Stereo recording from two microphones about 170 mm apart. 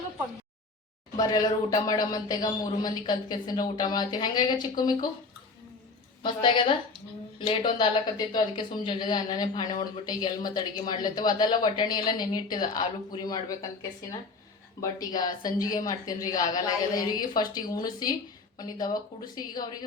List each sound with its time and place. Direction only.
1.1 s a man's voice: 25° left (ahead or behind)
6.2 s a man's voice: 30° left (ahead or behind)
14.8 s a man's voice: 20° left (ahead or behind)